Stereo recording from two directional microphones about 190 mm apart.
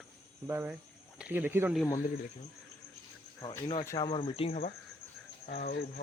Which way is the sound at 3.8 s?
20° left (ahead or behind).